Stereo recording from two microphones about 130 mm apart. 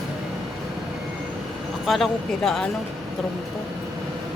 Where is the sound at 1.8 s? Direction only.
Centre (ahead or behind).